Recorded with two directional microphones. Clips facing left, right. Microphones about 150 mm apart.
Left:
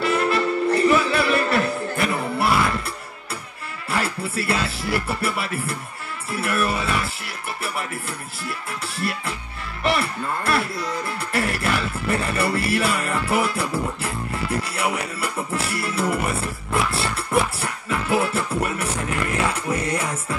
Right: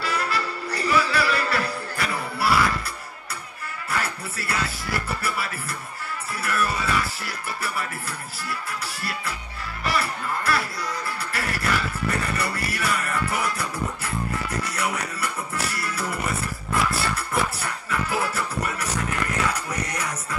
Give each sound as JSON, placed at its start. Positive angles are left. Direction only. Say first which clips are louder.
{"t": 0.0, "sound": "music", "louder": "left 7 dB", "side_deg": 25}
{"t": 3.9, "sound": "speech", "louder": "left 5 dB", "side_deg": 25}
{"t": 19.3, "sound": "music", "louder": "left 4 dB", "side_deg": 25}